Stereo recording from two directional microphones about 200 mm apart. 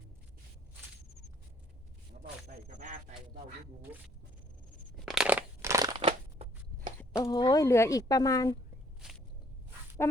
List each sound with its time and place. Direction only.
2.1 s a sound: 40° right (ahead or behind)
3.9 s speech: 10° right (ahead or behind)
4.9 s crushing: centre (ahead or behind)
6.0 s a sound: 30° right (ahead or behind)
7.2 s speech: 20° left (ahead or behind)
10.0 s speech: 15° left (ahead or behind)